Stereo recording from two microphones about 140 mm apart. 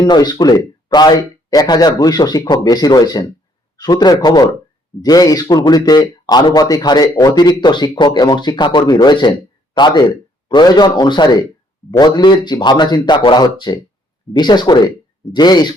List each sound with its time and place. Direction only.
0.0 s speech: 30° left (ahead or behind)